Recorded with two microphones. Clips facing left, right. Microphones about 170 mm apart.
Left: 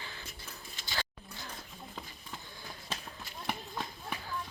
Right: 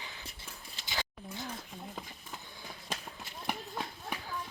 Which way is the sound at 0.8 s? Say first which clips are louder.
Even; 20° right (ahead or behind).